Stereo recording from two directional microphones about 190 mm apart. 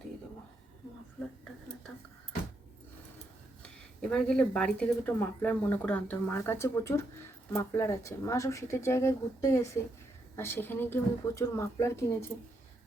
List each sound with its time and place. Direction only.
3.6 s speech: 5° left (ahead or behind)